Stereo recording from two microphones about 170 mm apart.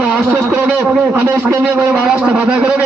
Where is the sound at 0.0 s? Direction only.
5° right (ahead or behind).